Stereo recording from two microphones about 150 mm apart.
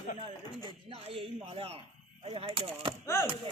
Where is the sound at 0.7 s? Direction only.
40° right (ahead or behind).